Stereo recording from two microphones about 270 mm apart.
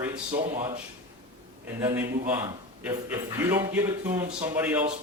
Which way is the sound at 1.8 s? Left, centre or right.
Centre.